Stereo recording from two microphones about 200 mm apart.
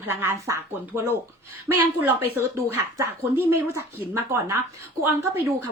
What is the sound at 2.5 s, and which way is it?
Speech, 15° right (ahead or behind).